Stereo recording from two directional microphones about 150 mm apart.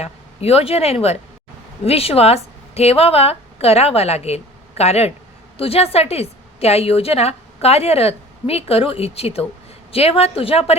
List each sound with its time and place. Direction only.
0.0 s a woman's voice: 45° left (ahead or behind)